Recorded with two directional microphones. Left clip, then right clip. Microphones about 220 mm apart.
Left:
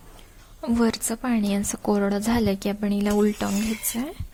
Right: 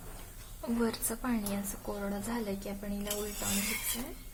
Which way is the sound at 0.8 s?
30° left (ahead or behind).